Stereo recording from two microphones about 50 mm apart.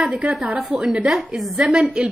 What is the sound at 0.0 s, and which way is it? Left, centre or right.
Speech, centre.